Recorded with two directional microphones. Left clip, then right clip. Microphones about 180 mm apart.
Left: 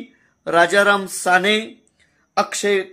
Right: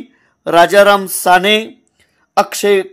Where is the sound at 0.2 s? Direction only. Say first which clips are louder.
Right 6 dB; 30° right (ahead or behind).